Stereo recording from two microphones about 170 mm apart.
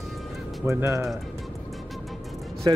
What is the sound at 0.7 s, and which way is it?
Speech, 15° right (ahead or behind).